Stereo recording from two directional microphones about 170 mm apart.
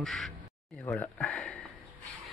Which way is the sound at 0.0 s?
5° left (ahead or behind).